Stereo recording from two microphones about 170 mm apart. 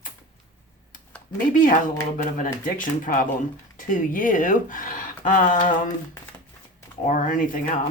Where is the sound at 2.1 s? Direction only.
50° left (ahead or behind).